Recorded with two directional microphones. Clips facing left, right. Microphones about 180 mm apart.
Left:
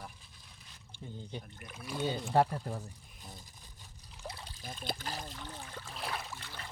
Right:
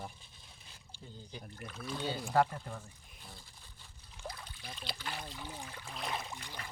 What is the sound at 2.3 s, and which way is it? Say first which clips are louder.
Speech: left 1 dB; 35° left (ahead or behind).